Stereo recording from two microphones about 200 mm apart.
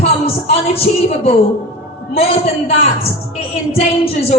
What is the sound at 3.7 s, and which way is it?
Music, 30° left (ahead or behind).